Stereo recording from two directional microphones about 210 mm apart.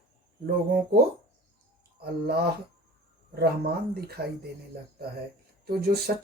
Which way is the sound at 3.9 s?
50° right (ahead or behind).